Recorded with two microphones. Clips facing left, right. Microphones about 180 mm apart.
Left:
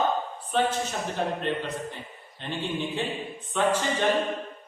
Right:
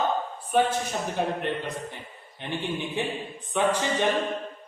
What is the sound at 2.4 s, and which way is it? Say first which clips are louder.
Speech: even; 15° right (ahead or behind).